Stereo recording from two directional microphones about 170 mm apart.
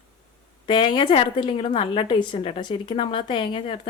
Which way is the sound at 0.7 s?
30° left (ahead or behind).